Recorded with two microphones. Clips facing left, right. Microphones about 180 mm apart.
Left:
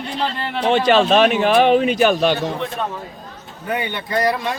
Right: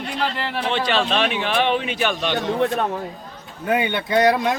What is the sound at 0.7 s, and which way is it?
A man's voice, 45° left (ahead or behind).